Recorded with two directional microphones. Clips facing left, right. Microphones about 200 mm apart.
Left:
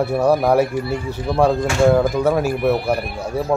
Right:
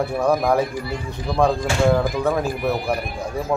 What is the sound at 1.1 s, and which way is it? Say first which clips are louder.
A man's voice: left 2 dB; 5° left (ahead or behind).